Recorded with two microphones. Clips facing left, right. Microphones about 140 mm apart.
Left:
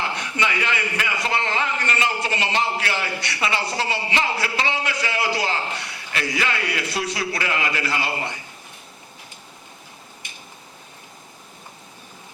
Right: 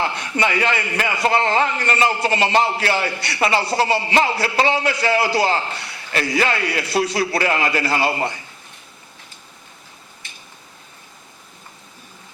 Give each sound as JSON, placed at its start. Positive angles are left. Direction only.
{"t": 0.0, "sound": "a man's voice", "side_deg": -40}